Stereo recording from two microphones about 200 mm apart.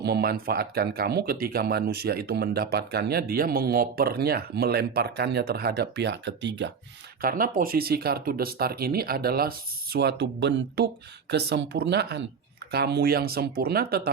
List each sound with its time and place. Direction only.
0.0 s speech: 50° right (ahead or behind)
7.2 s speech: 45° right (ahead or behind)